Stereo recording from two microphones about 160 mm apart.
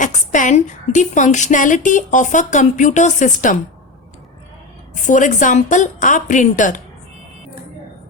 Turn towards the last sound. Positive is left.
turn(degrees=55)  # may be behind; listen again after turning